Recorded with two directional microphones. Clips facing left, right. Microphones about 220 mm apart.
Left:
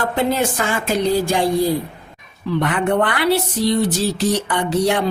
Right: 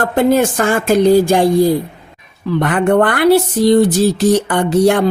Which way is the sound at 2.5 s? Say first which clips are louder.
Right 5 dB; 50° right (ahead or behind).